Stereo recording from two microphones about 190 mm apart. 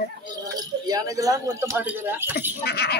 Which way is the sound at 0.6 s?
20° right (ahead or behind).